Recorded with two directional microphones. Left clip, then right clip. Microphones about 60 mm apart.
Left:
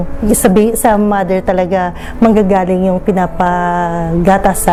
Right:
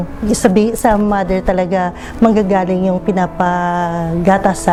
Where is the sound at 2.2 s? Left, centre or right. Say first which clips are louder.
Left 2 dB; centre.